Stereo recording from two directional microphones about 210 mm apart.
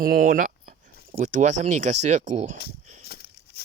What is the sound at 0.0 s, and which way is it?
Speech, 45° right (ahead or behind).